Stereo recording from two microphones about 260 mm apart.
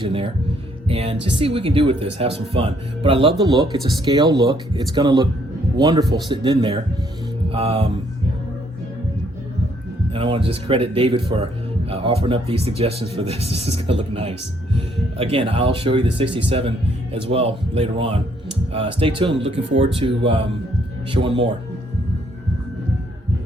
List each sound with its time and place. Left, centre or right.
0.0 s speech: right
10.1 s speech: centre